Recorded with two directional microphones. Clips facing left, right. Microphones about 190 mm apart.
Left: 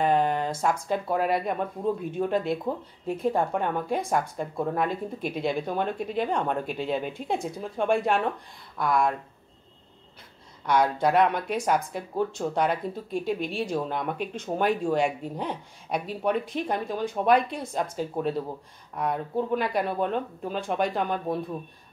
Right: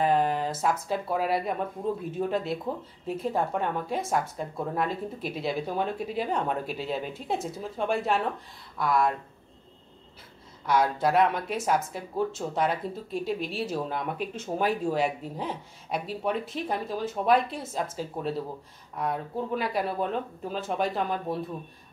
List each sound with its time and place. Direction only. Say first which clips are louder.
0.0 s speech: left 1 dB; centre (ahead or behind)
10.7 s speech: left 1 dB; 5° right (ahead or behind)